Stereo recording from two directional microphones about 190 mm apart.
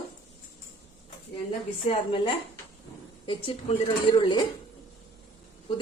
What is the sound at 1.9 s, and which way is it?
Speech, 25° left (ahead or behind).